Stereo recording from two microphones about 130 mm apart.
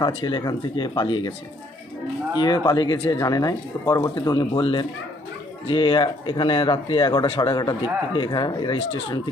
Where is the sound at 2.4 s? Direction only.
35° left (ahead or behind).